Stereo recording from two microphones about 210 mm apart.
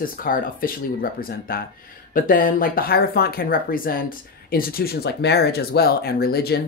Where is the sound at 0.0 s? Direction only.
40° left (ahead or behind).